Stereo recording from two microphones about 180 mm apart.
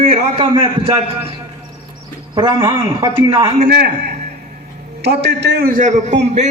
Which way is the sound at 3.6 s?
65° right (ahead or behind).